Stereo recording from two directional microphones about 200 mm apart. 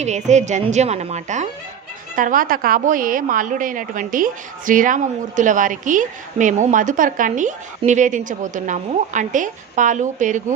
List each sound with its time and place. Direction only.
0.0 s a woman's voice: 35° right (ahead or behind)